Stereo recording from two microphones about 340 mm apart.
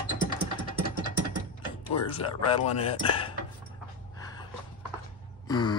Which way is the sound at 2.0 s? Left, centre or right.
Centre.